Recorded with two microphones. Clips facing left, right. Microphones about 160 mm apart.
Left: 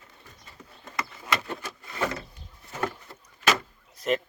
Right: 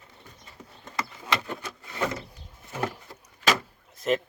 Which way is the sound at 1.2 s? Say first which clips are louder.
Even; 20° right (ahead or behind).